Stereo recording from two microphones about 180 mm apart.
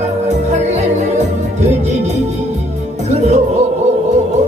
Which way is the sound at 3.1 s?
40° right (ahead or behind).